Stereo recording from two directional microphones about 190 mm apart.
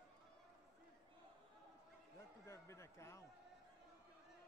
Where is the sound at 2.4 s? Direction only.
15° left (ahead or behind).